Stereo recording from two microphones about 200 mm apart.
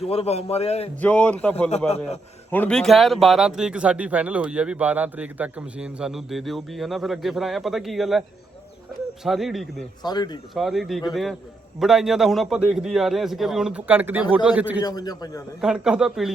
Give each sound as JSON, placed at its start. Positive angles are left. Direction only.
{"t": 0.1, "sound": "a man's voice", "side_deg": 30}
{"t": 1.0, "sound": "speech", "side_deg": 5}
{"t": 9.2, "sound": "speech", "side_deg": 0}
{"t": 10.0, "sound": "a man's voice", "side_deg": 20}
{"t": 10.5, "sound": "speech", "side_deg": 0}
{"t": 14.8, "sound": "a man's voice", "side_deg": 20}
{"t": 15.6, "sound": "speech", "side_deg": -5}